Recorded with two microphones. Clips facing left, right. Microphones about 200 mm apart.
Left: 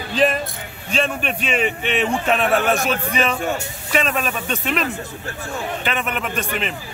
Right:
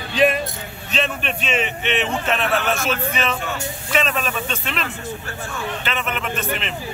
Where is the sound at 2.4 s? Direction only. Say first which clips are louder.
Left 4 dB; 50° left (ahead or behind).